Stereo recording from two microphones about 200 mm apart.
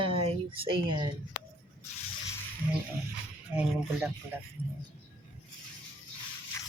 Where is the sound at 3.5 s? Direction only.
5° right (ahead or behind).